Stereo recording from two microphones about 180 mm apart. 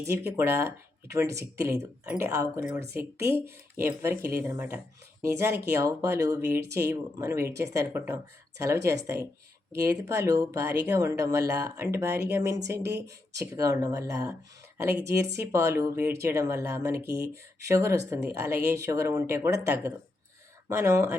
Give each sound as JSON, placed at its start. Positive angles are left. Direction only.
{"t": 0.0, "sound": "speech", "side_deg": -15}
{"t": 20.7, "sound": "speech", "side_deg": -15}